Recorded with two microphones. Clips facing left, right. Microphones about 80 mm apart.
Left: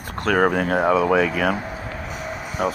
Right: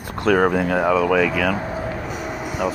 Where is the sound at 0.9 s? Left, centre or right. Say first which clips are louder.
Right 1 dB; left.